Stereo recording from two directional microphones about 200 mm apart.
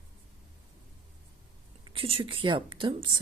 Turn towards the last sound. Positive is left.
turn(degrees=-25)  # may be behind; listen again after turning